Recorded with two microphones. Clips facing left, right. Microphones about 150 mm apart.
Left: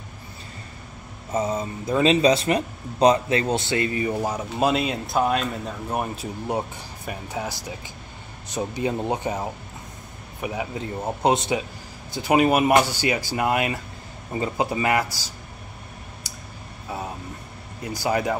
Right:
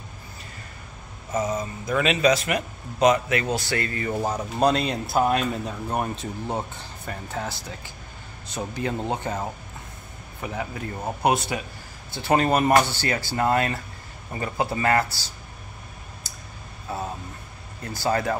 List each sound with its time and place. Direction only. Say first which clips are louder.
1.3 s speech: left 1 dB; 30° left (ahead or behind)
4.1 s speech: even; 5° left (ahead or behind)
17.8 s speech: left 1 dB; 15° left (ahead or behind)